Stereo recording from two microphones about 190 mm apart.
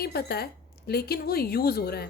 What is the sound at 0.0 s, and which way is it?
A woman's voice, 55° left (ahead or behind).